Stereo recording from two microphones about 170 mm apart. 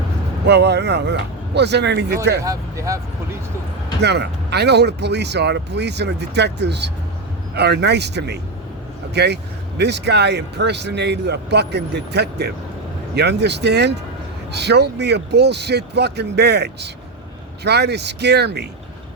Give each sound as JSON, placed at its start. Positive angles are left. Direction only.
{"t": 0.4, "sound": "speech", "side_deg": -80}
{"t": 2.4, "sound": "speech", "side_deg": -20}
{"t": 4.0, "sound": "speech", "side_deg": -80}
{"t": 7.5, "sound": "speech", "side_deg": -80}